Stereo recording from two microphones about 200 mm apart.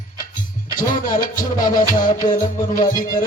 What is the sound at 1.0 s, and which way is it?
Music, 45° left (ahead or behind).